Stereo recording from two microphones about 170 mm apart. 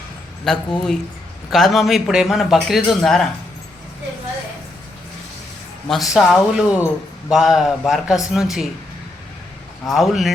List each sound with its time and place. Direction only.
0.4 s a man's voice: 5° left (ahead or behind)
5.9 s a man's voice: centre (ahead or behind)
9.8 s a man's voice: centre (ahead or behind)